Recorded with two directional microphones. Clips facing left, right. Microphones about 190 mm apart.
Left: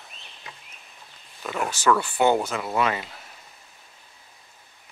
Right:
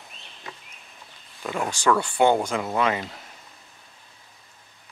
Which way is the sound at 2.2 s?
25° right (ahead or behind).